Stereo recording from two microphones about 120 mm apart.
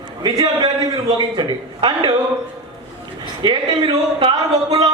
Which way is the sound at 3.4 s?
40° right (ahead or behind).